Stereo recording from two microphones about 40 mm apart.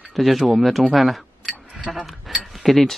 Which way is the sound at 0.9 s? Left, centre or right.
Centre.